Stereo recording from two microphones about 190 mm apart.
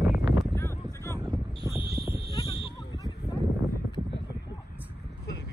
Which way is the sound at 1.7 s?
15° right (ahead or behind).